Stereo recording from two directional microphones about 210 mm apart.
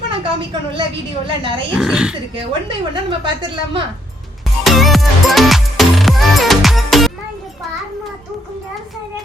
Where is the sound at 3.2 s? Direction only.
25° right (ahead or behind).